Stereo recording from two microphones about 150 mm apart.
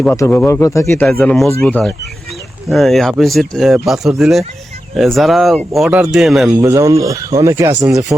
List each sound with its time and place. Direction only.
0.1 s speech: 15° left (ahead or behind)
1.0 s speech: 5° left (ahead or behind)
6.6 s speech: 20° right (ahead or behind)